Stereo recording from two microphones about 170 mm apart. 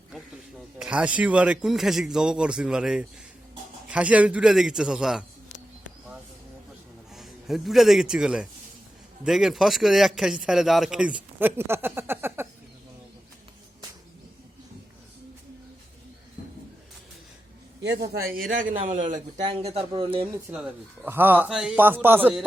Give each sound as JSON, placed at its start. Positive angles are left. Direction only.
{"t": 0.8, "sound": "a man's voice", "side_deg": -5}
{"t": 7.1, "sound": "a man's voice", "side_deg": 0}
{"t": 17.8, "sound": "a man's voice", "side_deg": -70}
{"t": 18.5, "sound": "a man's voice", "side_deg": -50}
{"t": 20.5, "sound": "a man's voice", "side_deg": -5}